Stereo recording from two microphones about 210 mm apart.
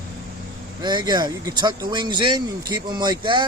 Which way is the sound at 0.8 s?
20° right (ahead or behind).